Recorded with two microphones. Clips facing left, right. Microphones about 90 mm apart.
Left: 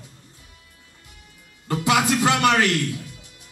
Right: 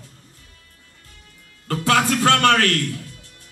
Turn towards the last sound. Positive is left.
turn(degrees=15)  # may be behind; listen again after turning